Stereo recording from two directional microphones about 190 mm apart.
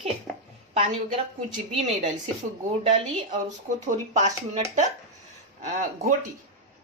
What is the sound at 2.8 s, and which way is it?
Speech, 40° right (ahead or behind).